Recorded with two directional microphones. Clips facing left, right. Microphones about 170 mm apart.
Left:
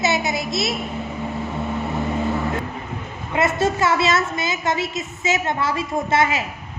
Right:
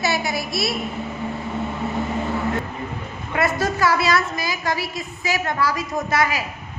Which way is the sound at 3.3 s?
25° left (ahead or behind).